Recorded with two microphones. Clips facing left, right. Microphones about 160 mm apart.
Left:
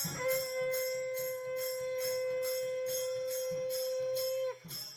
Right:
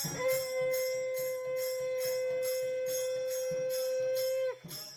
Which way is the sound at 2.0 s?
90° right.